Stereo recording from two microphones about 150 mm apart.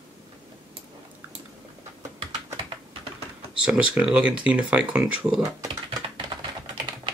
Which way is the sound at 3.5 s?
5° right (ahead or behind).